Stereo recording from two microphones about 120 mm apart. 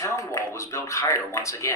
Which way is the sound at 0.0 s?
25° left (ahead or behind).